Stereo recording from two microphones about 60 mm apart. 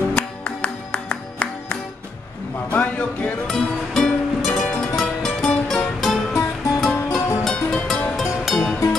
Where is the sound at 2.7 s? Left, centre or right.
Left.